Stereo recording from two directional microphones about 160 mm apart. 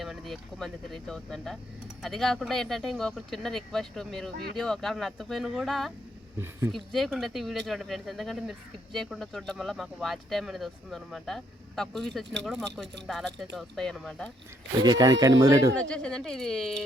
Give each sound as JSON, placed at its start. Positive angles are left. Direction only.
{"t": 0.0, "sound": "speech", "side_deg": 0}
{"t": 14.8, "sound": "speech", "side_deg": -25}
{"t": 15.7, "sound": "speech", "side_deg": 5}